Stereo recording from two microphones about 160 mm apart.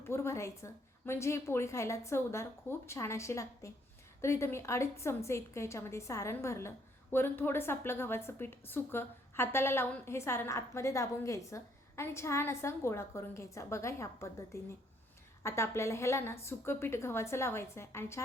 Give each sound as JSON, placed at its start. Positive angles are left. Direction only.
{"t": 0.0, "sound": "a woman's voice", "side_deg": 15}